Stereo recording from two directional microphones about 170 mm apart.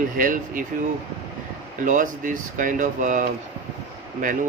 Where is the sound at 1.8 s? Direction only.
50° right (ahead or behind).